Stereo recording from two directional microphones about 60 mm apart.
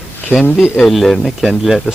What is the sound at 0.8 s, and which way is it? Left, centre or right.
Speech, centre.